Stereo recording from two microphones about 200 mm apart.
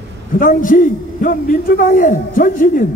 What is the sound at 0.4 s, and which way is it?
A man's voice, 45° left (ahead or behind).